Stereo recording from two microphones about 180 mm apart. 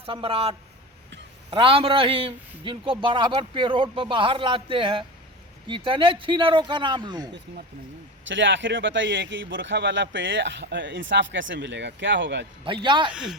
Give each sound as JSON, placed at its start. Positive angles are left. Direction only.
{"t": 0.0, "sound": "a man's voice", "side_deg": -30}
{"t": 8.2, "sound": "speech", "side_deg": -90}
{"t": 12.6, "sound": "speech", "side_deg": -25}